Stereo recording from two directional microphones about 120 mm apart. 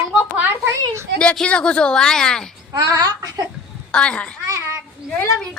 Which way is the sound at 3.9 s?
10° left (ahead or behind).